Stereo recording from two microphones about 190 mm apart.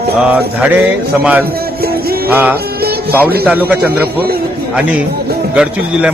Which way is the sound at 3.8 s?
55° right (ahead or behind).